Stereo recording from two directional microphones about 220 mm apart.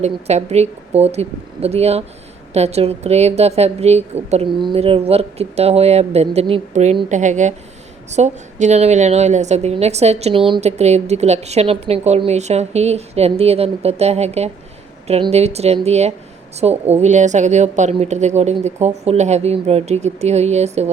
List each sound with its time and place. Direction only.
0.0 s a woman's voice: 30° right (ahead or behind)